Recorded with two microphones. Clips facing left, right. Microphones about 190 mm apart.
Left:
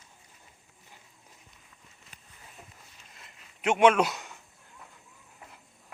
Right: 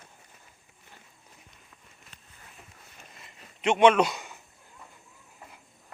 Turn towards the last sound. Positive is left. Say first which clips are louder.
# right 1 dB
turn(degrees=0)  # may be behind; listen again after turning